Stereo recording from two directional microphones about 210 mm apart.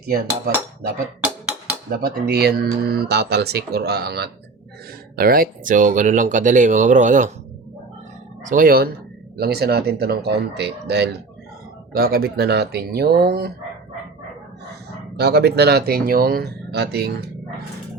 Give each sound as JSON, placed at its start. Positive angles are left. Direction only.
{"t": 1.2, "sound": "a sound", "side_deg": -5}
{"t": 1.9, "sound": "speech", "side_deg": -45}
{"t": 8.4, "sound": "speech", "side_deg": -40}
{"t": 15.1, "sound": "speech", "side_deg": -50}